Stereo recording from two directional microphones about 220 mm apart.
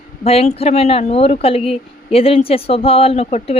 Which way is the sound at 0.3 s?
25° left (ahead or behind).